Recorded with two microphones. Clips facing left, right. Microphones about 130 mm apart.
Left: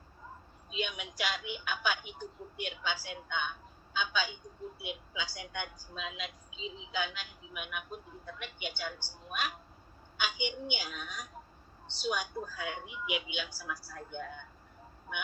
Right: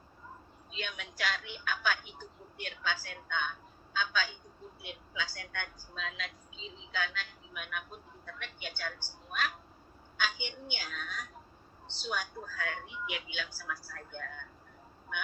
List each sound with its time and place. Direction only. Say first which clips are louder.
0.7 s a woman's voice: left 5 dB; 15° left (ahead or behind)
6.6 s a woman's voice: left 6 dB; 35° right (ahead or behind)
6.9 s a woman's voice: even; 15° left (ahead or behind)